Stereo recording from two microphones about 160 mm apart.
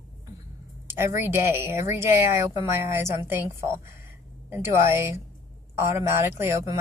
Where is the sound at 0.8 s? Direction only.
15° right (ahead or behind).